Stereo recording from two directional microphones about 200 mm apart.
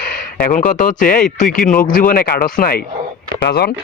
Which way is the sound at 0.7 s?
40° left (ahead or behind).